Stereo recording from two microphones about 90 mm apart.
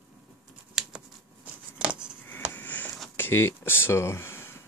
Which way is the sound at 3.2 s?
30° left (ahead or behind).